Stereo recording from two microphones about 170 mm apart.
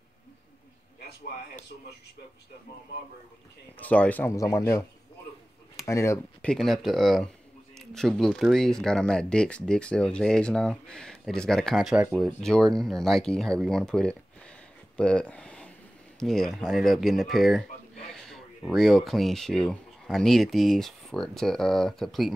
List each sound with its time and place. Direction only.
3.7 s speech: 10° left (ahead or behind)
5.9 s speech: 15° left (ahead or behind)
6.5 s speech: centre (ahead or behind)